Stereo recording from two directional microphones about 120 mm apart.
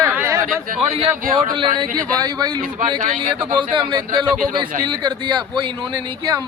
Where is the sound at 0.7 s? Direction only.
55° right (ahead or behind).